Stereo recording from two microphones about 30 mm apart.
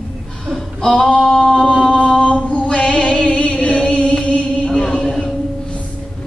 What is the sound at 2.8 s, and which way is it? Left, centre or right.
Music, left.